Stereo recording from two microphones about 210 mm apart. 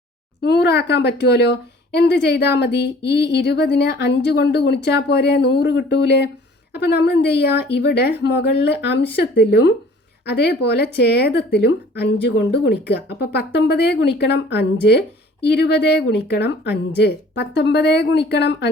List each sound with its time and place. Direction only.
0.4 s speech: 50° left (ahead or behind)